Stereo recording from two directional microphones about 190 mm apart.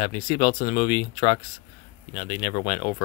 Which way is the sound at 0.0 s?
25° left (ahead or behind).